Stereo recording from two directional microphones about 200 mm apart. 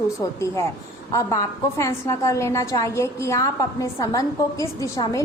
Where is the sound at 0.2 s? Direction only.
15° left (ahead or behind).